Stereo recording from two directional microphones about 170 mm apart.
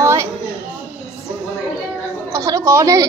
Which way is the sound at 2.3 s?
20° right (ahead or behind).